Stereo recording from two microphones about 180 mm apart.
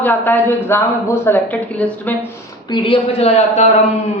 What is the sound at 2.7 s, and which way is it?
Speech, 30° left (ahead or behind).